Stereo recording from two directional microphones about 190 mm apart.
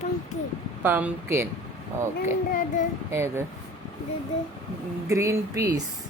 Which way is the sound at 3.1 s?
15° right (ahead or behind).